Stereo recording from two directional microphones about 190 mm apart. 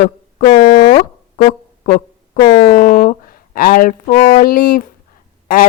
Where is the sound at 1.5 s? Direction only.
40° left (ahead or behind).